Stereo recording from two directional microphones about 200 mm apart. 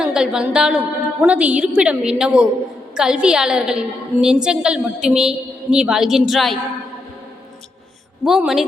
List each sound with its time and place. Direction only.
0.0 s a woman's voice: 5° right (ahead or behind)
8.2 s a woman's voice: centre (ahead or behind)